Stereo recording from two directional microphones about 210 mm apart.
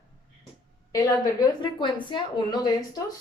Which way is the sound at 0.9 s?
20° left (ahead or behind).